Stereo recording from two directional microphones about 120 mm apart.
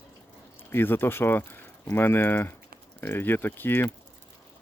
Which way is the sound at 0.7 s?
20° left (ahead or behind).